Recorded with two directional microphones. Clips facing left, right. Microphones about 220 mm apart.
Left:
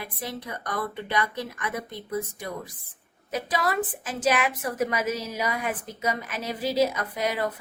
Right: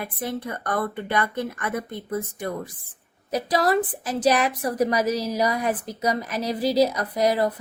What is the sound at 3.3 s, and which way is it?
A woman's voice, 40° right (ahead or behind).